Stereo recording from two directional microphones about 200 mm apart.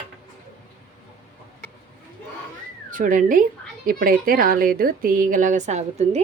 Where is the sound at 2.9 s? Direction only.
40° right (ahead or behind).